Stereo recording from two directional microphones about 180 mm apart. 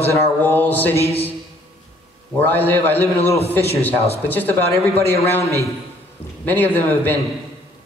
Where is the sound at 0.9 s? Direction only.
35° left (ahead or behind).